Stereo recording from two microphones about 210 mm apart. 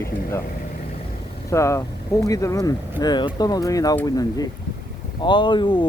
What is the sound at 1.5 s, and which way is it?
Speech, 15° left (ahead or behind).